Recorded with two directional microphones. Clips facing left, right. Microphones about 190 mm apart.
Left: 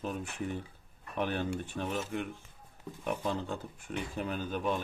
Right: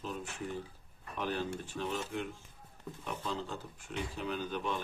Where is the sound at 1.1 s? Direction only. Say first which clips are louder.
Left 3 dB; 60° left (ahead or behind).